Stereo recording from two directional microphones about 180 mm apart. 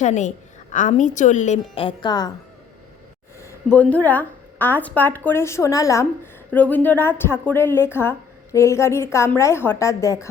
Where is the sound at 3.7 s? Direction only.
10° left (ahead or behind).